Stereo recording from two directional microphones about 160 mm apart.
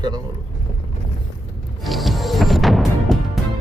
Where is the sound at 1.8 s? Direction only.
Centre (ahead or behind).